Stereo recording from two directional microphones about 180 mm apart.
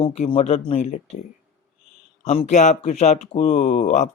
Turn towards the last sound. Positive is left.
turn(degrees=40)  # may be behind; listen again after turning